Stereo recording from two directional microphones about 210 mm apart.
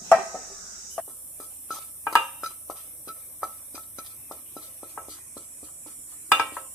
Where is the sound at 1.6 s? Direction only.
Centre (ahead or behind).